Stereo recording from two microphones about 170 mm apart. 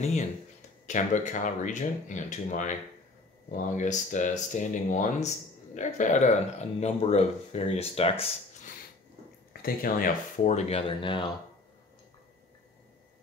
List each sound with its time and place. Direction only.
0.0 s speech: 45° left (ahead or behind)
9.5 s speech: 60° left (ahead or behind)
10.5 s speech: 35° left (ahead or behind)